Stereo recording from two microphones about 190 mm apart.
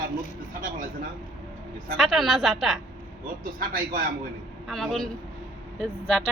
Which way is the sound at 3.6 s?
50° right (ahead or behind).